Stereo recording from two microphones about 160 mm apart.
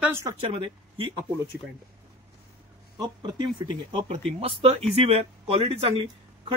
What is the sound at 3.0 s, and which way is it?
Speech, 25° right (ahead or behind).